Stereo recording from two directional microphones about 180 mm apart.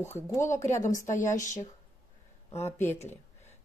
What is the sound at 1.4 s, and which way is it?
Speech, 45° left (ahead or behind).